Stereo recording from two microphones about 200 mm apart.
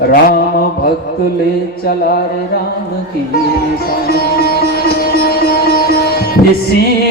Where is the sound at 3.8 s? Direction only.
50° left (ahead or behind).